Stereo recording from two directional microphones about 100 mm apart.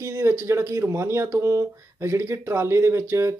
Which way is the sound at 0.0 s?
30° right (ahead or behind).